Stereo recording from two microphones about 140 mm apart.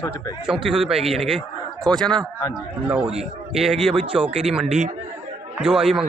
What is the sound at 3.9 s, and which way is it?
Speech, 45° right (ahead or behind).